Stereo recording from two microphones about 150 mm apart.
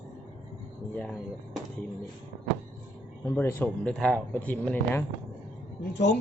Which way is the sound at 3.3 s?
10° left (ahead or behind).